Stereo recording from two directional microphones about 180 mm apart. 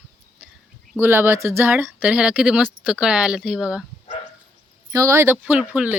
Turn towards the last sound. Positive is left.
turn(degrees=-10)  # may be behind; listen again after turning